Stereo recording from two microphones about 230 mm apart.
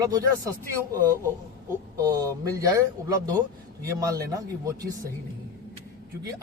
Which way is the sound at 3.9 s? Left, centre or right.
Centre.